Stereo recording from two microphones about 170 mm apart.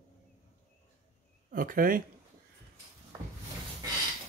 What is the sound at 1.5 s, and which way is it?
Speech, 55° right (ahead or behind).